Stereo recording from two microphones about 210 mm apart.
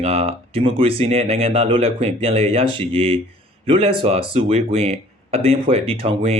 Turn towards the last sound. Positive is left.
turn(degrees=-30)  # may be behind; listen again after turning